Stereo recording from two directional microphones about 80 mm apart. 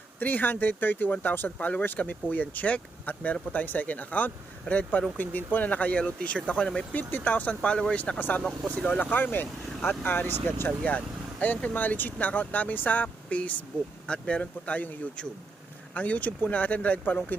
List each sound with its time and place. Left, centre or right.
0.2 s speech: left
9.0 s speech: left